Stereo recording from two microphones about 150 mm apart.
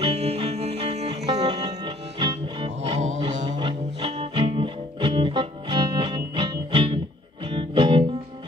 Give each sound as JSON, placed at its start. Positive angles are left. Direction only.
{"t": 0.0, "sound": "music", "side_deg": -40}
{"t": 1.9, "sound": "music", "side_deg": -30}
{"t": 2.8, "sound": "music", "side_deg": -45}
{"t": 3.5, "sound": "music", "side_deg": -35}